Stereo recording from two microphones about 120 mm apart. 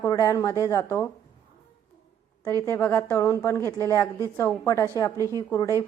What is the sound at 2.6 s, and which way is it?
A woman's voice, 25° left (ahead or behind).